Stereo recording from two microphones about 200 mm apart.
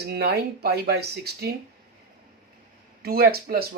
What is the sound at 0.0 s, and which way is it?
Speech, 55° right (ahead or behind).